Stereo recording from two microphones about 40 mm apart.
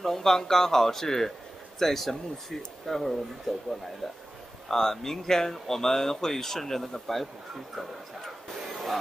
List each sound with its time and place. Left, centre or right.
0.0 s speech: centre
4.6 s speech: centre
8.6 s a sound: centre